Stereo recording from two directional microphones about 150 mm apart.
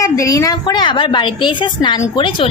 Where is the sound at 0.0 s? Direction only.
20° left (ahead or behind).